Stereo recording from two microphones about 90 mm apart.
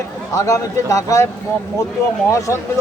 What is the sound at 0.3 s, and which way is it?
Speech, 40° left (ahead or behind).